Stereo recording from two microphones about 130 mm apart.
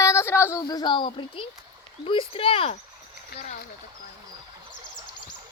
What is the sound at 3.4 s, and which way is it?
Speech, 65° left (ahead or behind).